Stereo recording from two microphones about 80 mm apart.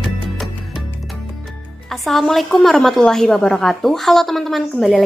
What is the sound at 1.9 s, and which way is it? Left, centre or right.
A woman's voice, centre.